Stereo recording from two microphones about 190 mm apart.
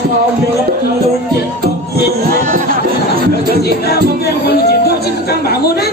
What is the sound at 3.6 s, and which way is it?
Music, 55° left (ahead or behind).